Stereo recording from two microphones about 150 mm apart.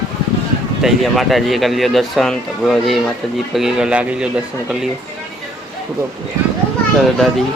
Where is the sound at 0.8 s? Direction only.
Centre (ahead or behind).